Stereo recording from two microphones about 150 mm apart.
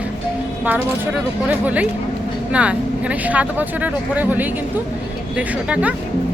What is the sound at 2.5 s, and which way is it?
Speech, 10° right (ahead or behind).